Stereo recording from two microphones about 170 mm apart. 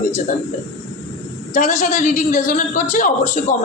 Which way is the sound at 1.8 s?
50° left (ahead or behind).